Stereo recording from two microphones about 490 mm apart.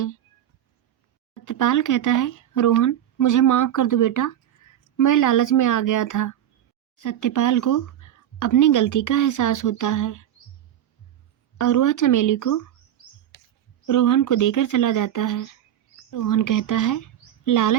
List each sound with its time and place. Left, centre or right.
1.3 s speech: left
11.5 s speech: left
13.8 s speech: left